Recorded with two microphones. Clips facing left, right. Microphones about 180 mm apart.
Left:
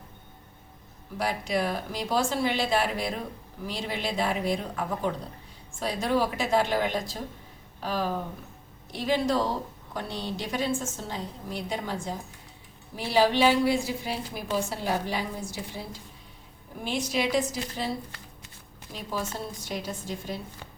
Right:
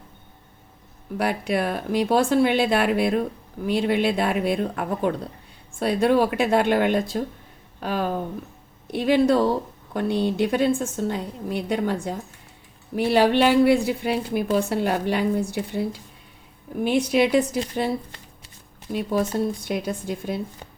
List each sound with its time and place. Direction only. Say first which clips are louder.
1.2 s a woman's voice: right 4 dB; 60° right (ahead or behind)
19.6 s a woman's voice: right 7 dB; 60° right (ahead or behind)